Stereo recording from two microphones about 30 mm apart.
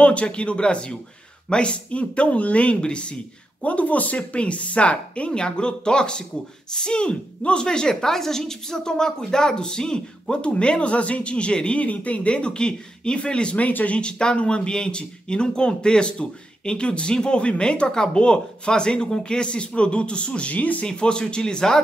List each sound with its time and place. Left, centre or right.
0.0 s speech: left
2.8 s speech: left
3.6 s speech: left
5.4 s speech: left
7.9 s speech: centre
10.3 s speech: left
11.8 s speech: left
13.6 s speech: left
13.8 s speech: left
20.5 s speech: left
20.8 s speech: left